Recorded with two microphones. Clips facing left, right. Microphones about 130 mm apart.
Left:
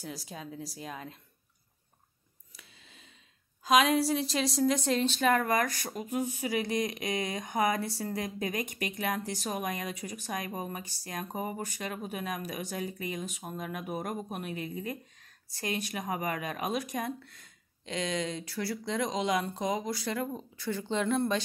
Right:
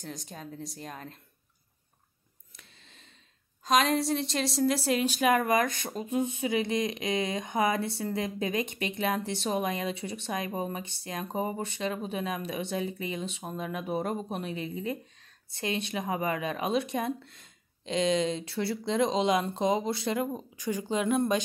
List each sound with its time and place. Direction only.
0.0 s speech: 5° left (ahead or behind)
2.5 s a sound: 5° left (ahead or behind)
3.6 s a woman's voice: centre (ahead or behind); by 21.4 s 15° right (ahead or behind)